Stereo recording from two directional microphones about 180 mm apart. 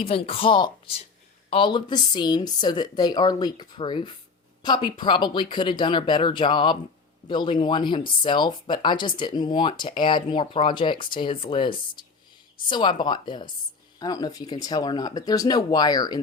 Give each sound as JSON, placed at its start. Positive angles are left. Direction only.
{"t": 0.0, "sound": "a woman's voice", "side_deg": 30}